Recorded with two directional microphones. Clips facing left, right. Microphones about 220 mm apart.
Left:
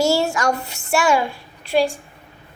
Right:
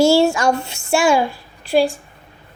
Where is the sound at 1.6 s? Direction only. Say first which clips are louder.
Right 3 dB; 35° right (ahead or behind).